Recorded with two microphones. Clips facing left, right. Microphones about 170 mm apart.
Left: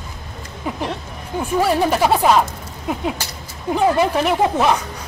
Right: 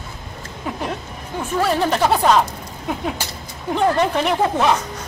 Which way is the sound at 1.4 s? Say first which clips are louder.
Left 2 dB; 10° left (ahead or behind).